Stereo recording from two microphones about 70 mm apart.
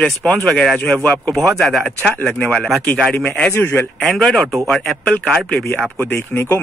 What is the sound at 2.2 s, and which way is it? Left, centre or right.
Speech, centre.